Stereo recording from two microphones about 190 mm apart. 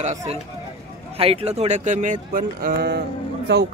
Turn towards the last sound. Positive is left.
turn(degrees=-60)  # may be behind; listen again after turning